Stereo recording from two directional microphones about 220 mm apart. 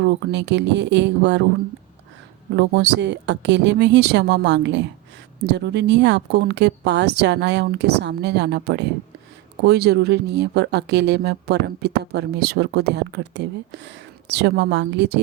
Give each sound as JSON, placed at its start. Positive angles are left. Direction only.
{"t": 0.0, "sound": "speech", "side_deg": -50}
{"t": 2.6, "sound": "speech", "side_deg": -50}